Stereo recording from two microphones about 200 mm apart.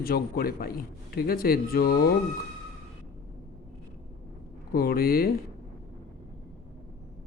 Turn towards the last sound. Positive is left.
turn(degrees=50)  # may be behind; listen again after turning